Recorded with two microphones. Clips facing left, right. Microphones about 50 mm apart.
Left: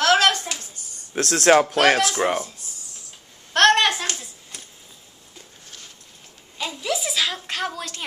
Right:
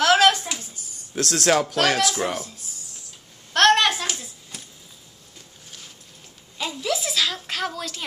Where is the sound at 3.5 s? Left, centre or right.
Centre.